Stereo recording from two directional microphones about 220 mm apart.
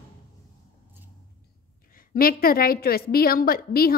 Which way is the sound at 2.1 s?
40° left (ahead or behind).